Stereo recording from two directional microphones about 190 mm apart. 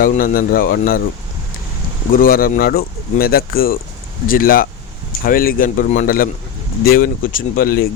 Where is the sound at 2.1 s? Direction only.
50° left (ahead or behind).